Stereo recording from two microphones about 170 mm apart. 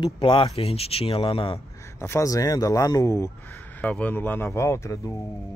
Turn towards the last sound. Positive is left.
turn(degrees=15)  # may be behind; listen again after turning